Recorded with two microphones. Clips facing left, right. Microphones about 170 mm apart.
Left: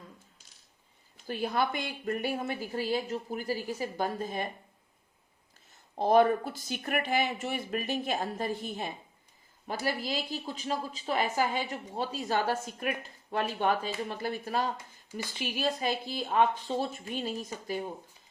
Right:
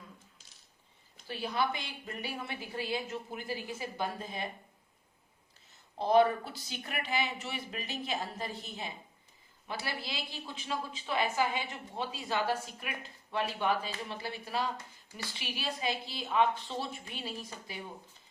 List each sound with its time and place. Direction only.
1.3 s speech: 50° left (ahead or behind)
6.0 s speech: 50° left (ahead or behind)